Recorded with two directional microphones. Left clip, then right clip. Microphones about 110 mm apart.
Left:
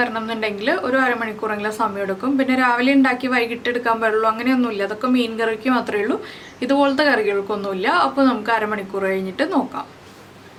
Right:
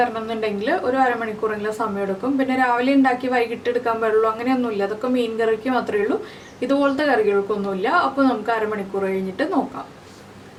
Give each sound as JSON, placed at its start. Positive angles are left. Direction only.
{"t": 0.0, "sound": "a woman's voice", "side_deg": 30}